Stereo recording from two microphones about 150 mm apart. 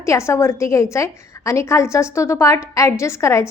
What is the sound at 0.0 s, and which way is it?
A woman's voice, 20° left (ahead or behind).